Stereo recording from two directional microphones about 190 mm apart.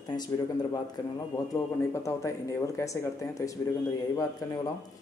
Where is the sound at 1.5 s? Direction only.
15° left (ahead or behind).